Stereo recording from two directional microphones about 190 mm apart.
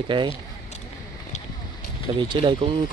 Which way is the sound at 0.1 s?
25° right (ahead or behind).